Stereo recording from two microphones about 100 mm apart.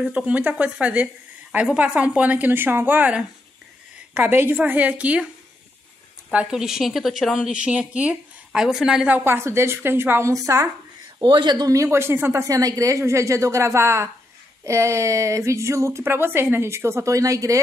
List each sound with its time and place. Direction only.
0.0 s a woman's voice: 15° right (ahead or behind)
6.3 s speech: 5° right (ahead or behind); by 10.7 s 35° right (ahead or behind)
11.1 s speech: 50° right (ahead or behind)
11.7 s speech: 30° right (ahead or behind)
12.4 s a woman's voice: 35° right (ahead or behind)